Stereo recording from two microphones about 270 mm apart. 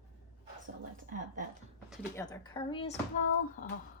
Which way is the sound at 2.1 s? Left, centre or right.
Centre.